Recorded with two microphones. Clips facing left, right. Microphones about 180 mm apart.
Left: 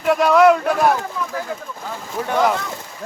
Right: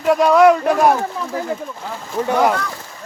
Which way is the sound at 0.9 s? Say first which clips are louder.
Right 3 dB; 25° right (ahead or behind).